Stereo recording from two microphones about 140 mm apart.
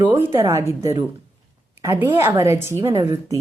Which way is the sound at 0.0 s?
15° right (ahead or behind).